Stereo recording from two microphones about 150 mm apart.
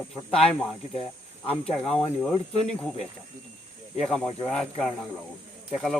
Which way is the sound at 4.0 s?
5° left (ahead or behind).